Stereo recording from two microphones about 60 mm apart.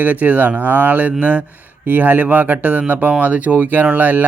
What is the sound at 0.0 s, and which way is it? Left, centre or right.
Speech, right.